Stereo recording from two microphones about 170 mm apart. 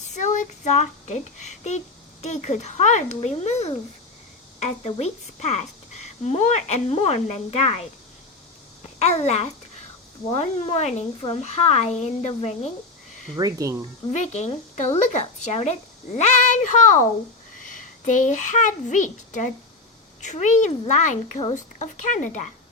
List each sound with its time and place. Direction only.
0.0 s a child's voice: 45° left (ahead or behind)
9.0 s a woman's voice: 40° left (ahead or behind)
13.3 s speech: 20° right (ahead or behind)
14.1 s a child's voice: 45° left (ahead or behind)